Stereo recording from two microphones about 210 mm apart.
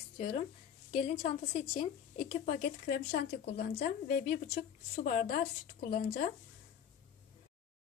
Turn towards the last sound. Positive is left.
turn(degrees=40)  # may be behind; listen again after turning